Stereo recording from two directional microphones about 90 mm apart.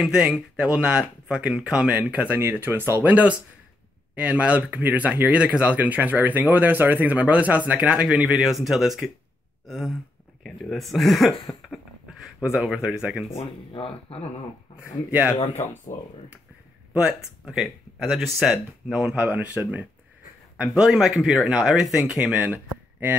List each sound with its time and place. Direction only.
0.0 s speech: 10° right (ahead or behind)
15.0 s speech: 20° right (ahead or behind)
15.9 s speech: 30° left (ahead or behind)
16.9 s speech: 10° right (ahead or behind)
19.1 s speech: 20° right (ahead or behind)